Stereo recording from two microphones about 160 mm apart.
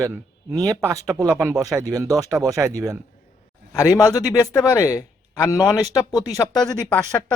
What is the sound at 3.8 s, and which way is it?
A man's voice, 20° left (ahead or behind).